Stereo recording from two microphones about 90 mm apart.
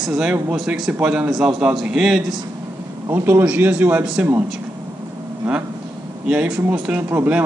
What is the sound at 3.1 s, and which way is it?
Speech, 25° right (ahead or behind).